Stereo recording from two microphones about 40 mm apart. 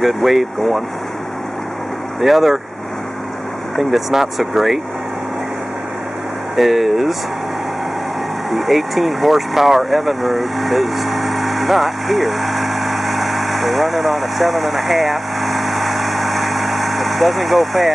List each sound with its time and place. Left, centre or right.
0.0 s speech: centre
2.1 s speech: centre
3.7 s speech: centre
6.5 s speech: centre
8.5 s speech: centre